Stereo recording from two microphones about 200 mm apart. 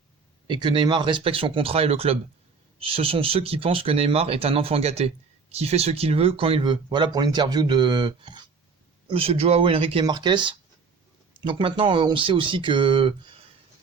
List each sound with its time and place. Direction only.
0.4 s speech: 25° right (ahead or behind)